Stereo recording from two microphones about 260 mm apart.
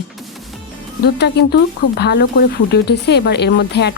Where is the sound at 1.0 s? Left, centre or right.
Left.